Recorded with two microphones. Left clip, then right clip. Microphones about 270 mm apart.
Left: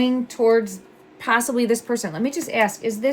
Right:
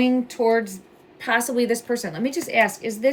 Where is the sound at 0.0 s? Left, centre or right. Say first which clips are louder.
Left 1 dB; centre.